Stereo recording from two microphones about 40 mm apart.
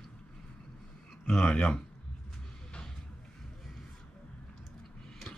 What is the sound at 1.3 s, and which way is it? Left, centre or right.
Speech, centre.